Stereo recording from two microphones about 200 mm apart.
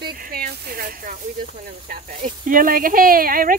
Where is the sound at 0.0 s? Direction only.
50° right (ahead or behind).